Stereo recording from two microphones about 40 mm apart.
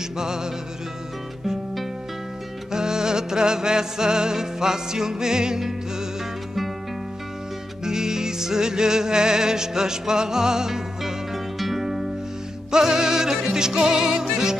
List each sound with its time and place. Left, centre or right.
0.2 s music: centre
2.7 s music: centre
7.8 s music: centre
12.7 s music: centre